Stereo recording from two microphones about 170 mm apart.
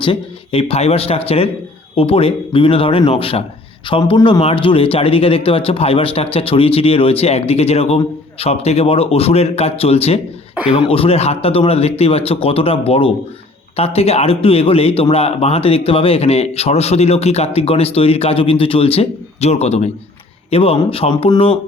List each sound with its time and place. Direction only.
0.0 s speech: 35° left (ahead or behind)